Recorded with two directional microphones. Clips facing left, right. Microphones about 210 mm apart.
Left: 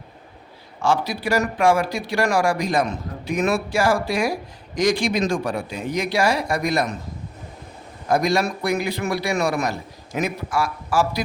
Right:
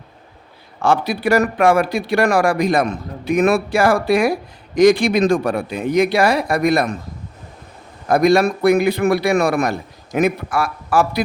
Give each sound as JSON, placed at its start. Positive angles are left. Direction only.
{"t": 0.8, "sound": "speech", "side_deg": -60}
{"t": 8.0, "sound": "speech", "side_deg": -60}